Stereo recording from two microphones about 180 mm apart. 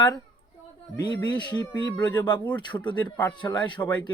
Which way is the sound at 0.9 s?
25° left (ahead or behind).